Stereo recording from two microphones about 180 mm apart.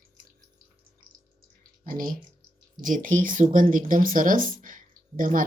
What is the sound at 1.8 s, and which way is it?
Speech, 50° right (ahead or behind).